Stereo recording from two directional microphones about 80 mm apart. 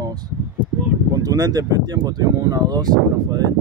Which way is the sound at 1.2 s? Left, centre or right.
Right.